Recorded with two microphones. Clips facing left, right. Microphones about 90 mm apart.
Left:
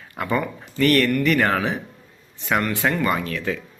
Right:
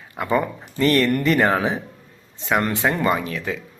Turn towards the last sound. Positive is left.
turn(degrees=-20)  # may be behind; listen again after turning